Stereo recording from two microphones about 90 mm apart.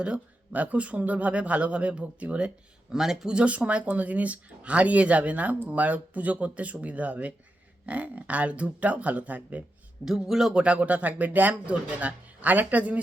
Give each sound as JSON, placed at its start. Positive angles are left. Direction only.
{"t": 0.0, "sound": "speech", "side_deg": -15}
{"t": 10.1, "sound": "speech", "side_deg": -5}